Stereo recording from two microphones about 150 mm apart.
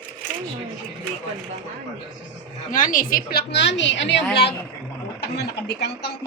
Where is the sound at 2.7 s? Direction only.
60° left (ahead or behind); by 3.4 s 80° left.